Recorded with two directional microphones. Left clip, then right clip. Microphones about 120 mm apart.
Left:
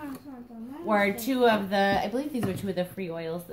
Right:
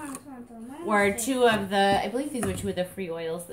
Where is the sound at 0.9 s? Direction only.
45° left (ahead or behind).